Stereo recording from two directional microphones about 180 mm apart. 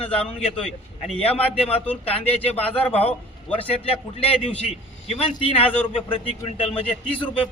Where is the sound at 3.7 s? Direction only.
30° left (ahead or behind).